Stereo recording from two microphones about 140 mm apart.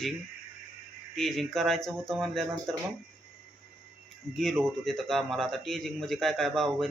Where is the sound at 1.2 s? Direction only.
Centre (ahead or behind).